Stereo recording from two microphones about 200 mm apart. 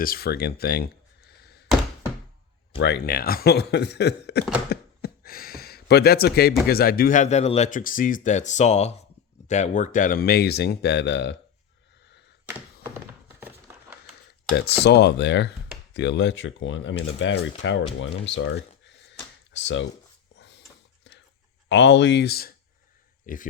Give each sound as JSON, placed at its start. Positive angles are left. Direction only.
{"t": 0.0, "sound": "speech", "side_deg": 50}
{"t": 2.7, "sound": "speech", "side_deg": 55}
{"t": 4.7, "sound": "a sound", "side_deg": 50}
{"t": 6.7, "sound": "speech", "side_deg": 50}
{"t": 14.8, "sound": "speech", "side_deg": 55}
{"t": 20.3, "sound": "dog", "side_deg": 55}
{"t": 21.7, "sound": "speech", "side_deg": 60}